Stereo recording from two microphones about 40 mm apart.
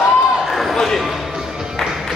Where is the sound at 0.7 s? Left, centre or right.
Centre.